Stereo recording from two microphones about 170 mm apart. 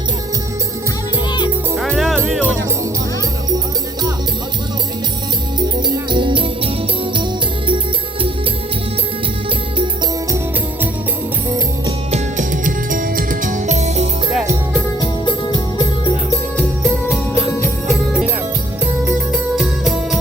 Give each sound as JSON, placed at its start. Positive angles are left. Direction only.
{"t": 1.7, "sound": "music", "side_deg": 0}
{"t": 6.1, "sound": "music", "side_deg": -30}
{"t": 12.1, "sound": "music", "side_deg": -50}
{"t": 15.5, "sound": "music", "side_deg": 25}
{"t": 16.6, "sound": "music", "side_deg": 0}
{"t": 19.0, "sound": "music", "side_deg": 0}